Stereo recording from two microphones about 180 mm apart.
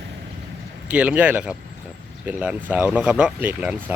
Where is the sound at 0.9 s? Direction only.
10° right (ahead or behind).